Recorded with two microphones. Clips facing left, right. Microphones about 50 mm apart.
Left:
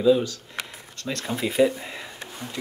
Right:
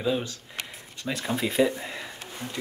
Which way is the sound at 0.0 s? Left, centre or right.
Right.